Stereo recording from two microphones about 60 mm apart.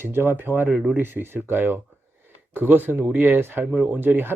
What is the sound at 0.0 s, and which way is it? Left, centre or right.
Speech, right.